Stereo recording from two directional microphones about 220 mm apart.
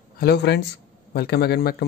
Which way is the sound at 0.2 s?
50° left (ahead or behind).